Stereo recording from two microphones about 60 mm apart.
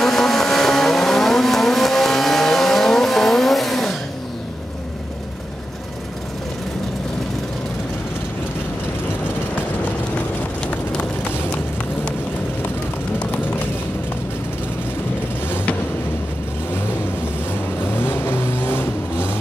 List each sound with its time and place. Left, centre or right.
0.0 s vehicle: centre
17.8 s vehicle: left